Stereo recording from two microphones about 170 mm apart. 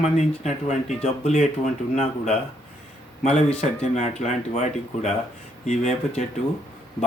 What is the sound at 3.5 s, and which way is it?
Speech, 40° left (ahead or behind).